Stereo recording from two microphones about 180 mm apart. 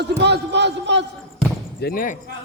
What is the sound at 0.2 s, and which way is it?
Speech, 70° right (ahead or behind).